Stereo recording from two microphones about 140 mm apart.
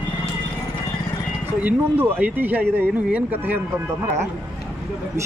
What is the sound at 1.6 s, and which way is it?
Speech, 10° right (ahead or behind).